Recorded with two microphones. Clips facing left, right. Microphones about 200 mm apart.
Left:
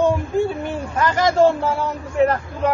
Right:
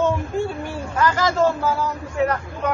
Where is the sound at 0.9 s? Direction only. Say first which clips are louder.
Left 3 dB; 25° left (ahead or behind).